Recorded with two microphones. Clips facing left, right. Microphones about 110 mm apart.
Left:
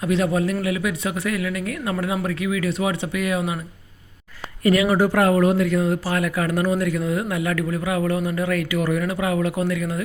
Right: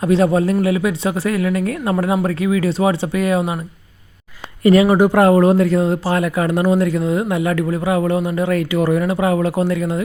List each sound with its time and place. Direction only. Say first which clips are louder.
0.0 s speech: right 6 dB; 35° right (ahead or behind)
4.6 s a man's voice: right 6 dB; 30° right (ahead or behind)